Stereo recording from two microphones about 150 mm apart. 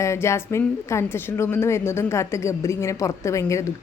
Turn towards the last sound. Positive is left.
turn(degrees=20)  # may be behind; listen again after turning